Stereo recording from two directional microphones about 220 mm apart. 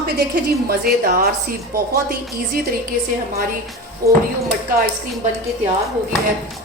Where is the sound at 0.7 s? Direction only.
45° right (ahead or behind).